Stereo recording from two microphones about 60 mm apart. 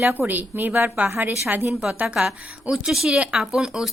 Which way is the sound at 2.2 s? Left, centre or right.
Right.